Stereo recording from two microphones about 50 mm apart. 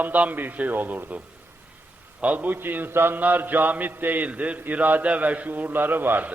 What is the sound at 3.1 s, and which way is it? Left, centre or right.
A man's voice, right.